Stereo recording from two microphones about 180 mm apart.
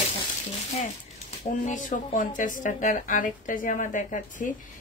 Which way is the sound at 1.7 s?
45° left (ahead or behind).